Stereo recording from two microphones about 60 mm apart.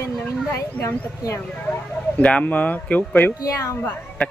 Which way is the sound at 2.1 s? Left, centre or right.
Left.